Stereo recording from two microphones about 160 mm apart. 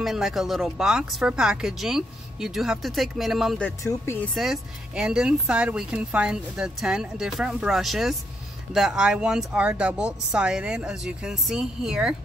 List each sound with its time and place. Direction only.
0.0 s speech: centre (ahead or behind)
3.8 s speech: 15° left (ahead or behind)
4.4 s speech: 5° right (ahead or behind)